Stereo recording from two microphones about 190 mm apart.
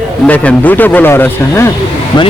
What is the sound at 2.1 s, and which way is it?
Music, 25° left (ahead or behind).